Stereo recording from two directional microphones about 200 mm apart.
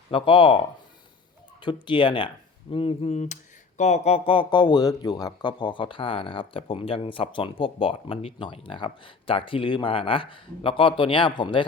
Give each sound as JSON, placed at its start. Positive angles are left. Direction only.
{"t": 0.1, "sound": "a man's voice", "side_deg": 25}
{"t": 1.6, "sound": "a man's voice", "side_deg": 25}